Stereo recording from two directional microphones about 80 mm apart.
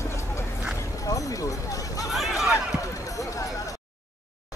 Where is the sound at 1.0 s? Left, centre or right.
Left.